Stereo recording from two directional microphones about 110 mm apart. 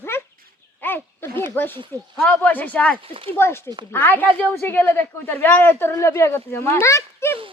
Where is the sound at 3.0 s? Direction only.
60° right (ahead or behind).